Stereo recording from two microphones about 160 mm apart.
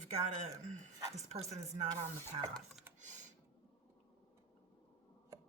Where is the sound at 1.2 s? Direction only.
45° right (ahead or behind).